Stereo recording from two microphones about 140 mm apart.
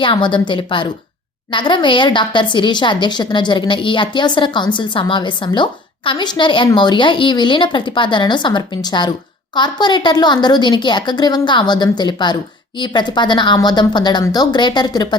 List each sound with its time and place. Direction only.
0.0 s speech: 35° left (ahead or behind)